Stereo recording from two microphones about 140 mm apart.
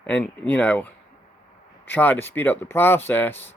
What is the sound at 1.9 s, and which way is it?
Speech, 15° left (ahead or behind).